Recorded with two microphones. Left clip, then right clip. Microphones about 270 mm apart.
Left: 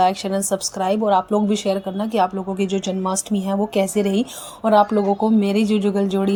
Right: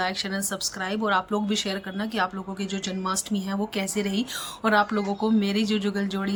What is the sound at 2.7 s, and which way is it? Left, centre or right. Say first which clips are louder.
Speech: left 2 dB; right.